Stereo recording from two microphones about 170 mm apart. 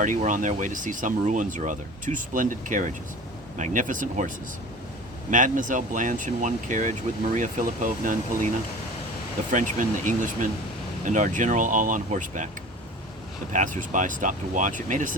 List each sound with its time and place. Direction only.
0.0 s speech: 50° right (ahead or behind)
5.3 s speech: 50° right (ahead or behind)
13.5 s speech: 50° right (ahead or behind)